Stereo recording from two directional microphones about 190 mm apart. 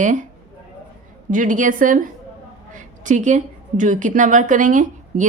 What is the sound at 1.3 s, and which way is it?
A woman's voice, 45° right (ahead or behind).